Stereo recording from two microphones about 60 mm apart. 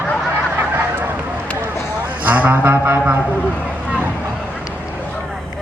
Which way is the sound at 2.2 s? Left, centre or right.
Right.